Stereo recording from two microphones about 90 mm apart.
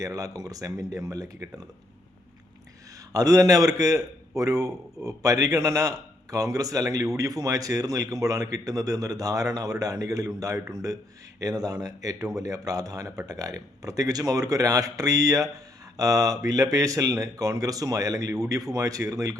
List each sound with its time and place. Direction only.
0.0 s speech: 40° right (ahead or behind)
3.1 s speech: 40° right (ahead or behind)